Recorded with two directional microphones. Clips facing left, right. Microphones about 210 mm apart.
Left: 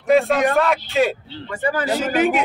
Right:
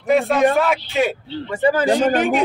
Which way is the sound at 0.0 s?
Centre (ahead or behind).